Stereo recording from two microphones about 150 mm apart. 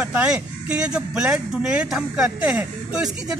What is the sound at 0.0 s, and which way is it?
Speech, 10° right (ahead or behind).